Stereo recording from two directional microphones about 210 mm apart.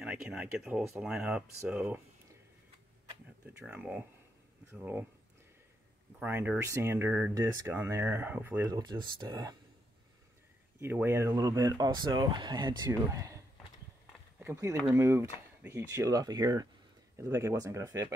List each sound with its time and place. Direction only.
0.0 s speech: 5° right (ahead or behind)
3.1 s speech: 10° right (ahead or behind)
6.1 s speech: 10° right (ahead or behind)
10.8 s speech: 10° right (ahead or behind)
14.4 s speech: 10° right (ahead or behind)